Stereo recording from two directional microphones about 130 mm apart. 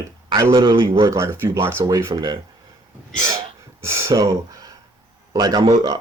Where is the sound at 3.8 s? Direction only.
20° right (ahead or behind).